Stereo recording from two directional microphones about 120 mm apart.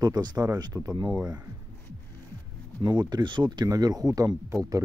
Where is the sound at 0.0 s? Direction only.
35° right (ahead or behind).